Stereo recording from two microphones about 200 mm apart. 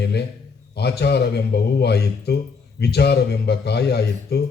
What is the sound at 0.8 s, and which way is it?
A man's voice, 55° left (ahead or behind).